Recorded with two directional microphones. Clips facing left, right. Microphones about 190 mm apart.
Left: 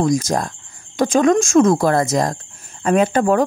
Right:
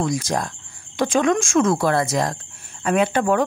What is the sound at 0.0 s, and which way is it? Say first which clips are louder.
Speech: left 5 dB; 45° left (ahead or behind).